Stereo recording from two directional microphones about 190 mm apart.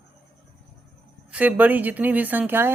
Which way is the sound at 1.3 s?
10° right (ahead or behind).